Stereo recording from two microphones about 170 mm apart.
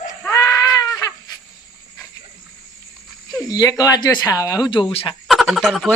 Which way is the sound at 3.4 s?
20° left (ahead or behind).